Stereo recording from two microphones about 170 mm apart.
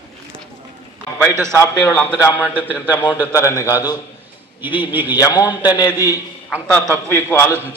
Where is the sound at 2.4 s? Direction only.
10° right (ahead or behind).